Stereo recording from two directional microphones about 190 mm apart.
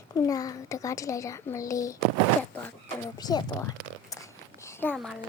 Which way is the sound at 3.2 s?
20° left (ahead or behind).